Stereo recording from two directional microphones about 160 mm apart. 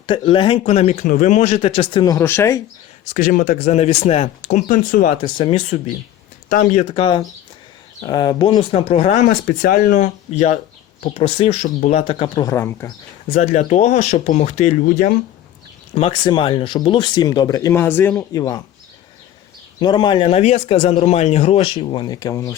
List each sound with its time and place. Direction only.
0.0 s speech: 30° left (ahead or behind); by 2.6 s 15° left (ahead or behind)
3.1 s speech: 55° left (ahead or behind)
5.2 s speech: 35° left (ahead or behind)
6.5 s speech: 55° left (ahead or behind)
6.9 s speech: 30° left (ahead or behind); by 9.6 s 55° left (ahead or behind)
9.6 s speech: 65° left (ahead or behind); by 10.6 s 45° left (ahead or behind)
11.0 s speech: 35° left (ahead or behind); by 12.9 s 15° left (ahead or behind)
13.2 s speech: 40° left (ahead or behind); by 15.2 s 55° left (ahead or behind)
16.0 s speech: 30° left (ahead or behind)
19.8 s speech: 30° left (ahead or behind)